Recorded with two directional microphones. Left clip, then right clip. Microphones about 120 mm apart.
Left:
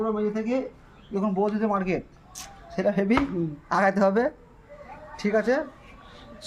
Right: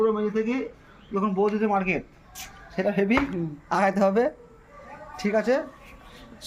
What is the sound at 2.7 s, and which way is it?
Speech, 45° left (ahead or behind).